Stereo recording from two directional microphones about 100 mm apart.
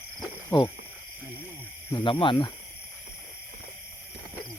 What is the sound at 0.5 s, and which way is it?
Speech, 45° left (ahead or behind).